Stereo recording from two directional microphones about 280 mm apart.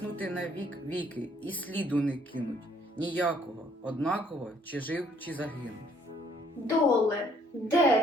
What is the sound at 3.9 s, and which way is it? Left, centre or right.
Speech, centre.